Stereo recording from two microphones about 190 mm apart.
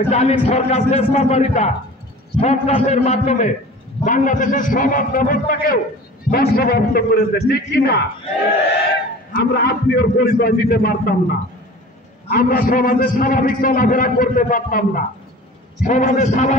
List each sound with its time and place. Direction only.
0.1 s a man's voice: 35° left (ahead or behind); by 8.0 s 60° left (ahead or behind)
9.3 s a man's voice: 55° left (ahead or behind)
12.3 s a man's voice: 50° left (ahead or behind)